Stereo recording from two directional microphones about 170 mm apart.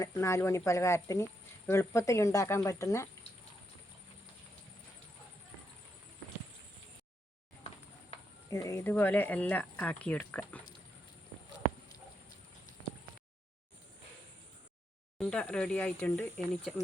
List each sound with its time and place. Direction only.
0.0 s speech: 20° left (ahead or behind)
8.4 s speech: 20° left (ahead or behind)
15.2 s speech: 5° left (ahead or behind)